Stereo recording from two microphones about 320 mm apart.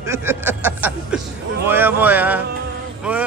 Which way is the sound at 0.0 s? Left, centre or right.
Centre.